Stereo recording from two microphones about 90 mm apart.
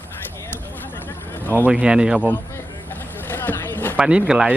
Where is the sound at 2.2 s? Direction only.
20° left (ahead or behind).